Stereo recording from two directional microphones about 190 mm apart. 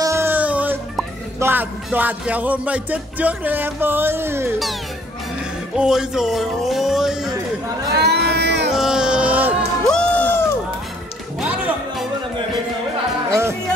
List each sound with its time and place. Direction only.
0.0 s music: 15° right (ahead or behind)
5.8 s music: 5° right (ahead or behind)
8.0 s a sound: 60° right (ahead or behind)
8.7 s music: 5° right (ahead or behind)
9.8 s crowd: 5° left (ahead or behind)
11.3 s music: 5° right (ahead or behind)
13.3 s music: 15° right (ahead or behind)